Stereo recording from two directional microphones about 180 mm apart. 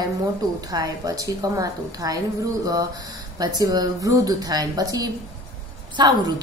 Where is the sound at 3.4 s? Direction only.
20° right (ahead or behind).